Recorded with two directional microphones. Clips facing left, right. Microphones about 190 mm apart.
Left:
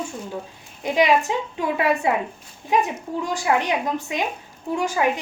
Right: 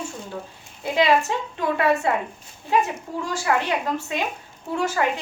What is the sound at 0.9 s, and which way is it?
A woman's voice, 15° left (ahead or behind).